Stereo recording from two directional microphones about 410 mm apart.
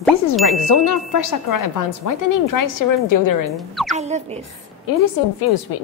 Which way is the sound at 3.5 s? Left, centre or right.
Centre.